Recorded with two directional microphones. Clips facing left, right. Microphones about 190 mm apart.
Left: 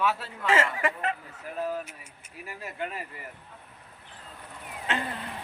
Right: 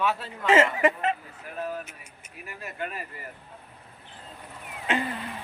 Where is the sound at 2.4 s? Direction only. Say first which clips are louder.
Even; 30° left (ahead or behind).